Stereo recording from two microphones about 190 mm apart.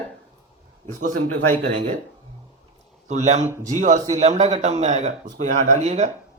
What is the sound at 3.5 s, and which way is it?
Speech, 15° right (ahead or behind).